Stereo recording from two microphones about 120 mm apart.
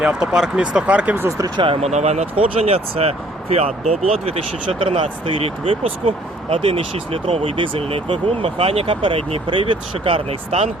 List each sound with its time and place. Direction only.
0.0 s speech: 5° right (ahead or behind)
1.5 s speech: 50° right (ahead or behind)
1.9 s speech: 70° right (ahead or behind)